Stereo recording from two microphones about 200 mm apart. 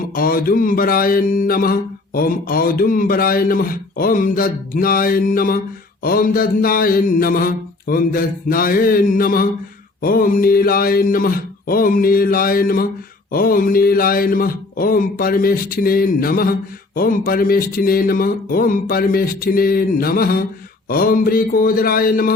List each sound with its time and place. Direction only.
0.1 s speech: 45° left (ahead or behind)